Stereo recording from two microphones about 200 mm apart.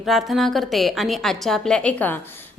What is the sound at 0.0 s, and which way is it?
A woman's voice, centre (ahead or behind).